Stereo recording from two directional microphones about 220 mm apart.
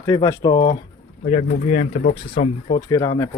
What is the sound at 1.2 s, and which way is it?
Speech, 35° left (ahead or behind).